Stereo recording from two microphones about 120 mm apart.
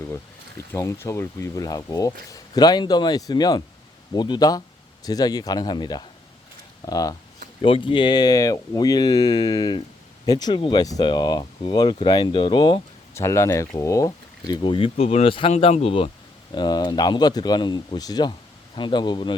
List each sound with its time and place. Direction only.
0.7 s speech: 25° left (ahead or behind)
7.6 s speech: 45° left (ahead or behind)
13.1 s speech: 25° left (ahead or behind); by 15.5 s 50° left (ahead or behind)
15.5 s speech: 65° left (ahead or behind)
16.6 s speech: 35° left (ahead or behind)